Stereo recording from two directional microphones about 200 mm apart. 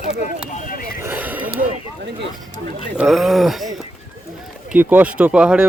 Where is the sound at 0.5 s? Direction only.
45° left (ahead or behind).